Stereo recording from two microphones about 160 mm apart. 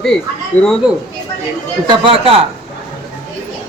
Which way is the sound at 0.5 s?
10° left (ahead or behind).